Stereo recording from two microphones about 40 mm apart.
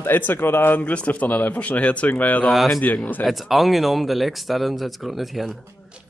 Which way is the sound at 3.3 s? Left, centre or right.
Centre.